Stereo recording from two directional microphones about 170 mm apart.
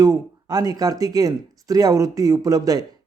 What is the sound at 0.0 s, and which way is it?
Speech, 20° right (ahead or behind).